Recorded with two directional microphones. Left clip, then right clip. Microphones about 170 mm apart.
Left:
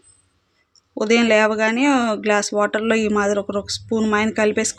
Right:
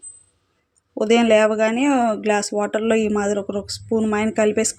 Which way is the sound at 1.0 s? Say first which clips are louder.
Right 1 dB; 10° right (ahead or behind).